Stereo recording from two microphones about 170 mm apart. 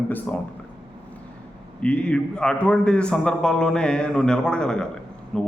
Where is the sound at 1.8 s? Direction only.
10° left (ahead or behind).